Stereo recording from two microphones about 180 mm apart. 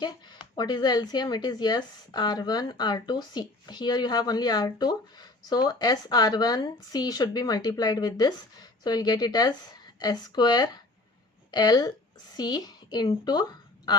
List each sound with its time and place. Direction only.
0.0 s a woman's voice: 25° left (ahead or behind)